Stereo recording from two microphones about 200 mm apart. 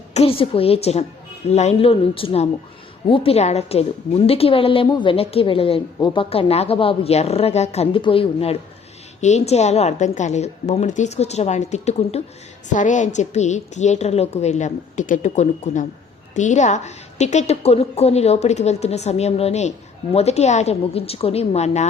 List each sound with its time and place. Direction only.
0.1 s a woman's voice: 30° left (ahead or behind)